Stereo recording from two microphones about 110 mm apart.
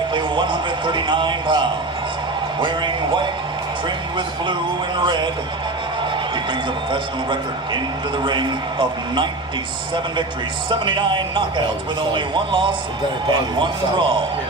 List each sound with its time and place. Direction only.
0.1 s a man's voice: 45° right (ahead or behind)
4.9 s a man's voice: 45° right (ahead or behind)
6.5 s a man's voice: 45° right (ahead or behind)
10.7 s a man's voice: 45° right (ahead or behind)